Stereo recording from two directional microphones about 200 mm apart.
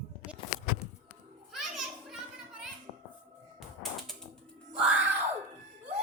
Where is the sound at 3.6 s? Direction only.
Centre (ahead or behind).